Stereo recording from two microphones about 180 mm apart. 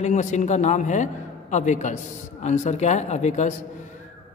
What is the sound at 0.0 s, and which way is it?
A man's voice, 40° left (ahead or behind).